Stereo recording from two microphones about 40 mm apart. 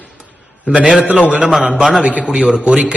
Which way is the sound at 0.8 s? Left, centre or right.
Right.